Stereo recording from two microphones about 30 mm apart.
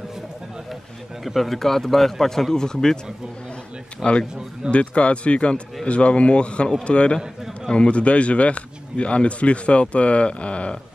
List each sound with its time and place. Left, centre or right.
1.2 s a man's voice: centre
2.5 s speech: left
4.0 s speech: left